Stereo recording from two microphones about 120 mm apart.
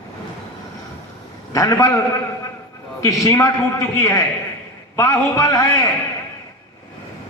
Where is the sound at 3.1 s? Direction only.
30° left (ahead or behind).